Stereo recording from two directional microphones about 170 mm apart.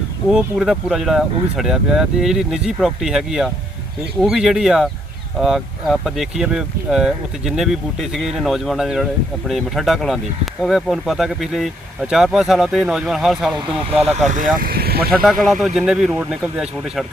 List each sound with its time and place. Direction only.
0.3 s speech: 5° right (ahead or behind)
14.3 s speech: 55° right (ahead or behind)
15.6 s speech: centre (ahead or behind)